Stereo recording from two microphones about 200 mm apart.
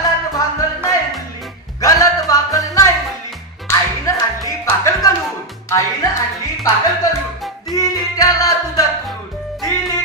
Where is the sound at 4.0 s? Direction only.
15° left (ahead or behind).